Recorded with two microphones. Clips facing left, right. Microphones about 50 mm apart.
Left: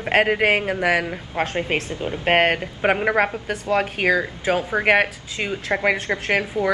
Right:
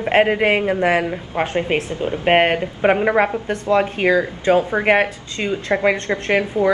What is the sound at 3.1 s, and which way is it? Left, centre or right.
A man's voice, centre.